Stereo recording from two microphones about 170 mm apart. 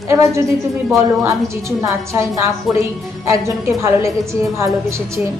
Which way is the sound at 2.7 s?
Centre (ahead or behind).